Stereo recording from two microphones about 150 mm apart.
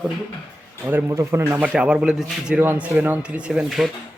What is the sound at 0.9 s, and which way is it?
A man's voice, 15° right (ahead or behind).